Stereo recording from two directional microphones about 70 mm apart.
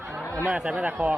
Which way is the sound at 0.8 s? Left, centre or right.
Right.